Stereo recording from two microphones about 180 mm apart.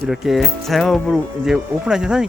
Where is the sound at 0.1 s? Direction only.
Centre (ahead or behind).